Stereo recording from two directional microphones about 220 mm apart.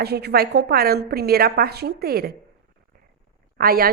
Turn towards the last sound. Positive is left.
turn(degrees=-45)  # may be behind; listen again after turning